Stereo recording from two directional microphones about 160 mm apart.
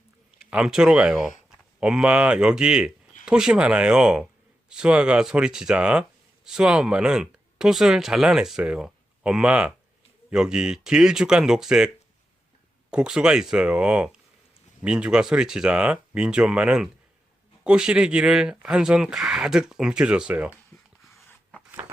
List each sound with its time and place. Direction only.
0.3 s speech: 5° right (ahead or behind)
12.9 s speech: 5° right (ahead or behind)
20.7 s a sound: 15° left (ahead or behind)